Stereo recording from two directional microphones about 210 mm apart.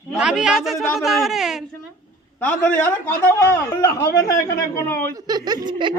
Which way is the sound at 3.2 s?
15° left (ahead or behind).